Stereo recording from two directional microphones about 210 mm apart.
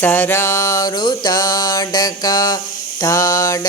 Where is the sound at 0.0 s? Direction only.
10° left (ahead or behind).